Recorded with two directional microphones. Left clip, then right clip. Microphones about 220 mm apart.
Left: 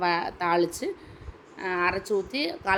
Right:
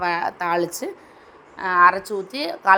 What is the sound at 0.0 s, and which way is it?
A woman's voice, 5° right (ahead or behind).